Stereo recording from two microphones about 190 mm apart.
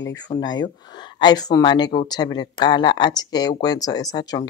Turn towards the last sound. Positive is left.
turn(degrees=20)  # may be behind; listen again after turning